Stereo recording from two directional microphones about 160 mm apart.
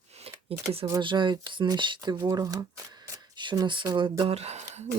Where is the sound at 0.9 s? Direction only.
30° right (ahead or behind).